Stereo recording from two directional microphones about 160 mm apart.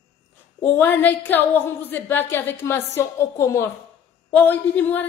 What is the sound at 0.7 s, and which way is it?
A woman's voice, 10° left (ahead or behind).